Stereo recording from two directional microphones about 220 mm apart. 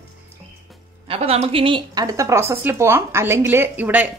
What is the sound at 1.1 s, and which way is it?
A woman's voice, 25° right (ahead or behind).